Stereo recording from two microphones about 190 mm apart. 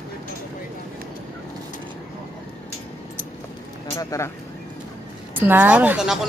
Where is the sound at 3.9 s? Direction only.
15° left (ahead or behind).